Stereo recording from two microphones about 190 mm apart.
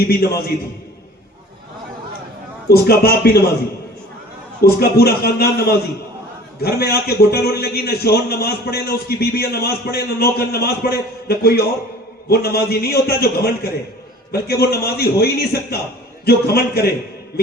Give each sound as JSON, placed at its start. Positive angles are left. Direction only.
{"t": 2.6, "sound": "a man's voice", "side_deg": 55}
{"t": 4.6, "sound": "a man's voice", "side_deg": 55}